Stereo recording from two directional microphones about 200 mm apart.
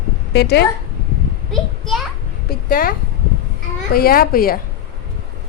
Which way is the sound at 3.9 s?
45° left (ahead or behind).